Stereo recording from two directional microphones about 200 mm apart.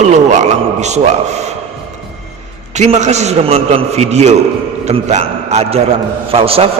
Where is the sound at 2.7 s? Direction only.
35° right (ahead or behind).